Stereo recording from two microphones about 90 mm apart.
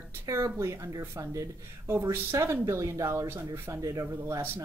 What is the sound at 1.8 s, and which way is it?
Speech, 25° right (ahead or behind).